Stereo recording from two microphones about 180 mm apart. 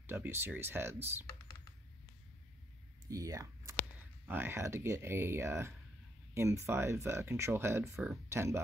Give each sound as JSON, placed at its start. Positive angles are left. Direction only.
{"t": 0.0, "sound": "speech", "side_deg": -10}
{"t": 1.2, "sound": "computer keyboard", "side_deg": 15}
{"t": 3.1, "sound": "speech", "side_deg": -20}